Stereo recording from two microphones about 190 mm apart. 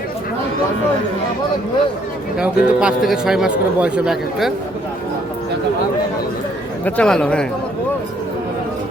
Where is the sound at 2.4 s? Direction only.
5° right (ahead or behind).